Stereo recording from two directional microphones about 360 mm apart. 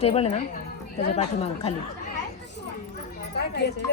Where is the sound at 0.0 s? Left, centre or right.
Centre.